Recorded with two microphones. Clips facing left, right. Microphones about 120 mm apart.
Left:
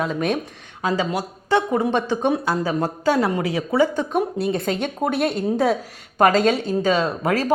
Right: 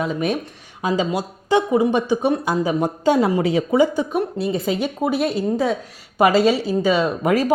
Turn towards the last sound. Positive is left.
turn(degrees=-15)  # may be behind; listen again after turning